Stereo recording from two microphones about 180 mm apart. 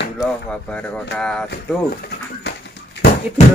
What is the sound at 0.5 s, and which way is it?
Speech, 5° left (ahead or behind).